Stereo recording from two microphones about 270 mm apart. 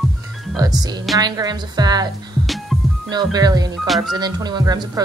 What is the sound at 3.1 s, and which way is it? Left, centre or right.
Speech, centre.